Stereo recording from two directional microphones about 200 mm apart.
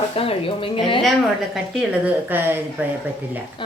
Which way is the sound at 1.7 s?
10° right (ahead or behind).